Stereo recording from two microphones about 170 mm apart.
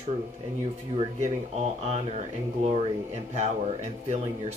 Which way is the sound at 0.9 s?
40° right (ahead or behind).